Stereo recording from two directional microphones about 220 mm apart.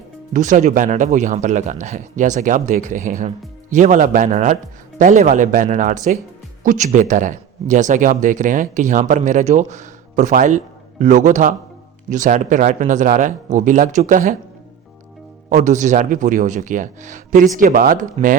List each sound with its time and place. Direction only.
0.3 s speech: 35° right (ahead or behind)
15.4 s speech: 35° right (ahead or behind)